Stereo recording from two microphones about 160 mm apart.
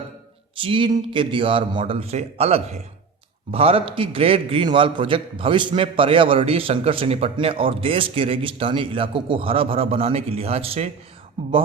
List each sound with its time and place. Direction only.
0.5 s a man's voice: 35° right (ahead or behind)